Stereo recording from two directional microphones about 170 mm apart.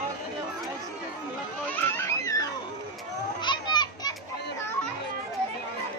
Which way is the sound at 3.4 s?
25° left (ahead or behind).